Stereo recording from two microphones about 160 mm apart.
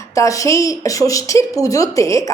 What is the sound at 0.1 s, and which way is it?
A woman's voice, 20° left (ahead or behind).